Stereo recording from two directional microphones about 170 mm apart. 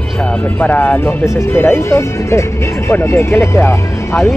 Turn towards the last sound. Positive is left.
turn(degrees=15)  # may be behind; listen again after turning